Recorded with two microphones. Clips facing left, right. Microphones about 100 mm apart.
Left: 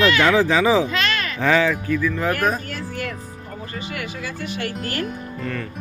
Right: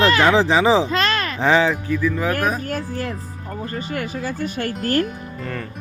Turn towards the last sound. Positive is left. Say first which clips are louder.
# right 5 dB
turn(degrees=-45)  # may be behind; listen again after turning